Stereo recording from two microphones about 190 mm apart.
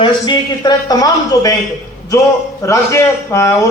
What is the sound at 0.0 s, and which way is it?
A man's voice, 20° left (ahead or behind).